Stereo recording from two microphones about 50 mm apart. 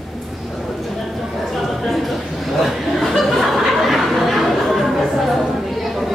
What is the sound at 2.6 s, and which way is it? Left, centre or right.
Chuckle, centre.